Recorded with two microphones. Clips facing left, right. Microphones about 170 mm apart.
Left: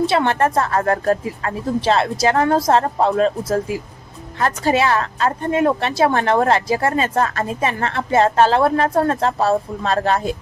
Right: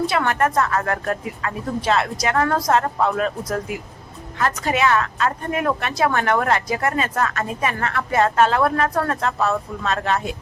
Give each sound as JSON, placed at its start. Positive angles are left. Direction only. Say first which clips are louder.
{"t": 0.0, "sound": "speech", "louder": "left 3 dB", "side_deg": 25}